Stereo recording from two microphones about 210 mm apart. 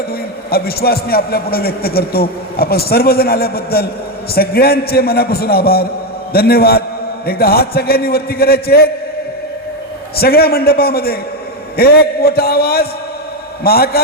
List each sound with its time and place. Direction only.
0.1 s a man's voice: 45° left (ahead or behind)
10.2 s a man's voice: 45° left (ahead or behind)